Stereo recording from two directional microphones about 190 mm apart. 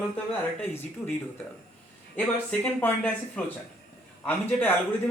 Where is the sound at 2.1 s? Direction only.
10° left (ahead or behind).